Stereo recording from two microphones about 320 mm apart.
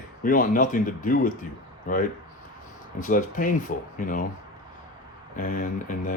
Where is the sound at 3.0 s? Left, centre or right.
Left.